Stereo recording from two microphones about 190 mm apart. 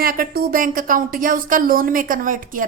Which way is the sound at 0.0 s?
50° right (ahead or behind).